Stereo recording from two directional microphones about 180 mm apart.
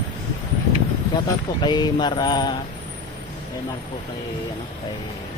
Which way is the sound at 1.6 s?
25° left (ahead or behind).